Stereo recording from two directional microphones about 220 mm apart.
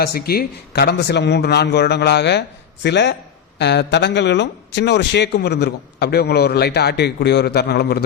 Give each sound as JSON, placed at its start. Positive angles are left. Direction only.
{"t": 0.0, "sound": "speech", "side_deg": 45}